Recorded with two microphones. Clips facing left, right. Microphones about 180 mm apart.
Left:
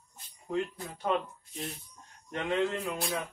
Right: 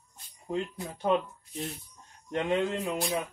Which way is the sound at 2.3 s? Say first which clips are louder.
Right 2 dB; 20° right (ahead or behind).